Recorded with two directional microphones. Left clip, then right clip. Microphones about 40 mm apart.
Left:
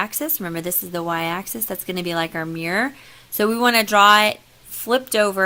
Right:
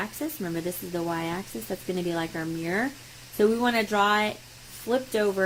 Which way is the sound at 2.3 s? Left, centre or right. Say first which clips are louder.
Left 6 dB; left.